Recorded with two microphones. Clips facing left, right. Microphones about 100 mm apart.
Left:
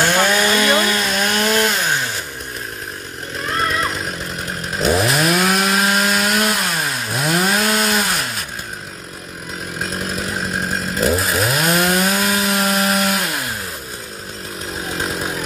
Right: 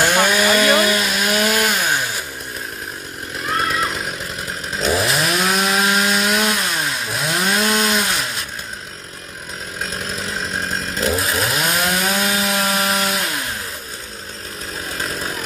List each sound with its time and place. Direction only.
0.0 s chainsaw: 10° right (ahead or behind)
4.7 s chainsaw: centre (ahead or behind)
10.7 s chainsaw: 5° left (ahead or behind)